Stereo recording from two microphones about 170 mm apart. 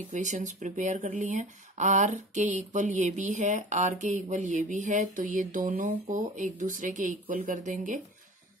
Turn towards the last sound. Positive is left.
turn(degrees=-45)  # may be behind; listen again after turning